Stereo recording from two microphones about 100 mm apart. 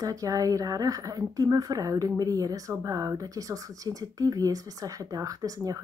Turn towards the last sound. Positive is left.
turn(degrees=-35)  # may be behind; listen again after turning